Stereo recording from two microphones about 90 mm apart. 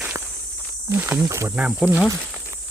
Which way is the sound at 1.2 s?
35° right (ahead or behind).